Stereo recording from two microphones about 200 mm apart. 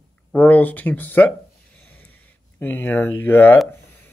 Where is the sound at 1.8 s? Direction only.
10° left (ahead or behind).